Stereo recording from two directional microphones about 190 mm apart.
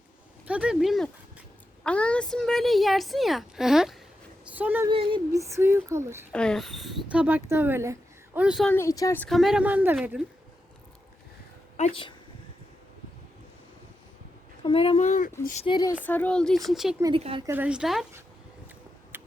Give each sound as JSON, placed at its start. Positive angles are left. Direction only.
{"t": 0.4, "sound": "a woman's voice", "side_deg": -5}
{"t": 4.9, "sound": "speech", "side_deg": -25}
{"t": 5.3, "sound": "a woman's voice", "side_deg": -15}
{"t": 6.3, "sound": "a woman's voice", "side_deg": 5}
{"t": 8.7, "sound": "speech", "side_deg": 15}
{"t": 9.2, "sound": "a woman's voice", "side_deg": 0}
{"t": 14.6, "sound": "speech", "side_deg": 30}
{"t": 15.6, "sound": "speech", "side_deg": 25}
{"t": 16.0, "sound": "a woman's voice", "side_deg": 10}
{"t": 17.0, "sound": "speech", "side_deg": -25}
{"t": 17.4, "sound": "a woman's voice", "side_deg": -10}
{"t": 19.1, "sound": "a sound", "side_deg": -10}